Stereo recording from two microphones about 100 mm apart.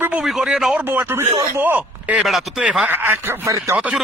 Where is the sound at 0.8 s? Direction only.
20° right (ahead or behind).